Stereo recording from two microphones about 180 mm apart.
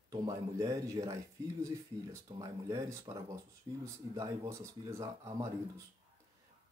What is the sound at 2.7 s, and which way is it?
Speech, 15° right (ahead or behind).